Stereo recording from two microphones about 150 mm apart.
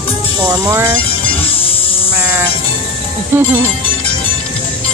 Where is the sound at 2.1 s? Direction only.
15° right (ahead or behind).